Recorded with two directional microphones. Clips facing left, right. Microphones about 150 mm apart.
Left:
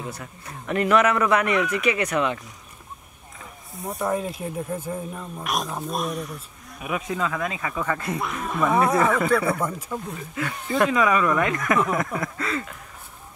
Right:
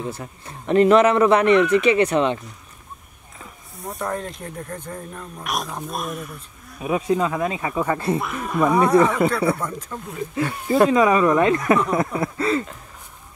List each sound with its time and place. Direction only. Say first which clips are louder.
0.1 s a man's voice: right 3 dB; 30° right (ahead or behind)
1.5 s speech: right 8 dB; centre (ahead or behind)
1.8 s a man's voice: right 6 dB; 30° right (ahead or behind)
3.8 s speech: left 2 dB; centre (ahead or behind)
6.8 s speech: right 6 dB; 30° right (ahead or behind)
8.2 s speech: right 3 dB; centre (ahead or behind)
10.7 s a man's voice: right 5 dB; 30° right (ahead or behind)